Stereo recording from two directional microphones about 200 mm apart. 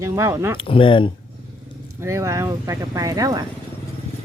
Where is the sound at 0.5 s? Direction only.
25° left (ahead or behind).